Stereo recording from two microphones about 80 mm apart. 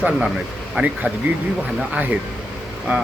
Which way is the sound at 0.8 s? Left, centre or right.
Centre.